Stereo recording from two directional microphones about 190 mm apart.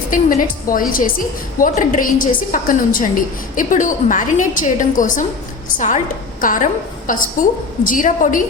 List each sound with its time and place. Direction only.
0.1 s a woman's voice: 45° left (ahead or behind)